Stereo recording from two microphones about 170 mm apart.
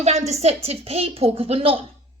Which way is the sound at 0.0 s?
40° right (ahead or behind).